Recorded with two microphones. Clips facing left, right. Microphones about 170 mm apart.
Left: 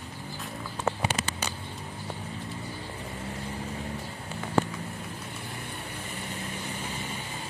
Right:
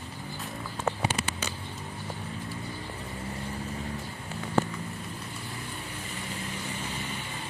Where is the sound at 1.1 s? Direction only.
65° left (ahead or behind).